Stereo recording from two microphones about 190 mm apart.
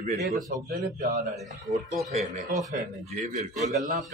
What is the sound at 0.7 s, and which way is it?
Speech, 45° right (ahead or behind).